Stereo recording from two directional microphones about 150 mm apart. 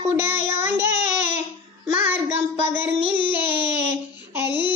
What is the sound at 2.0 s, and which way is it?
Child singing, 10° right (ahead or behind).